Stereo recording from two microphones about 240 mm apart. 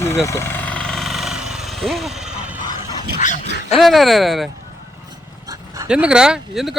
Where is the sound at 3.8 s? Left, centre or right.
Centre.